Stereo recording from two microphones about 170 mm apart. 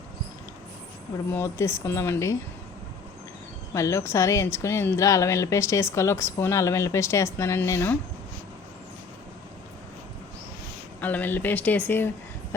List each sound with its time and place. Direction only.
1.3 s a woman's voice: 15° left (ahead or behind)
3.8 s a woman's voice: 15° left (ahead or behind)
11.0 s a woman's voice: 10° left (ahead or behind)